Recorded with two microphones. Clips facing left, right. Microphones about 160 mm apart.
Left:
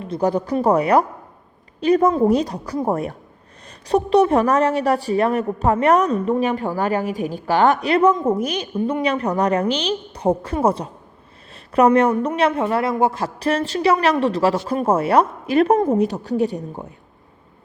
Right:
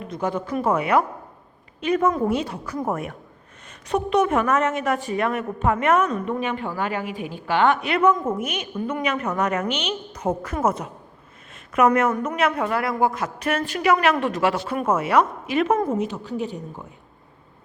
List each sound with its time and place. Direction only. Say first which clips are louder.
0.0 s a woman's voice: left 6 dB; 35° left (ahead or behind)